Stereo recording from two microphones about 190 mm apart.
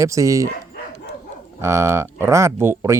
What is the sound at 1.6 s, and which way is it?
Speech, 15° right (ahead or behind).